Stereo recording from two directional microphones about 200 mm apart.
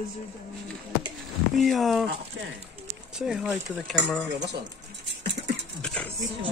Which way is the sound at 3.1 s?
5° right (ahead or behind).